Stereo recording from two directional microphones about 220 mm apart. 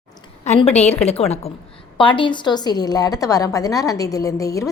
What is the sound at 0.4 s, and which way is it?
A woman's voice, 30° left (ahead or behind).